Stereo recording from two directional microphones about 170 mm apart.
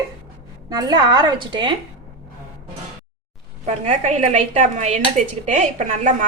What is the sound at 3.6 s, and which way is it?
A woman's voice, 45° right (ahead or behind).